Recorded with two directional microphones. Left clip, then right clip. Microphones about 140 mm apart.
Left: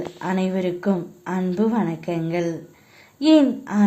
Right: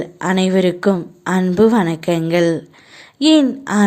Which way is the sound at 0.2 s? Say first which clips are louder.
Right 9 dB; 35° right (ahead or behind).